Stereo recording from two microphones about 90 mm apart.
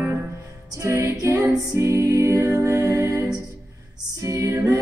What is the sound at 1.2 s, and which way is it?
Music, 35° right (ahead or behind).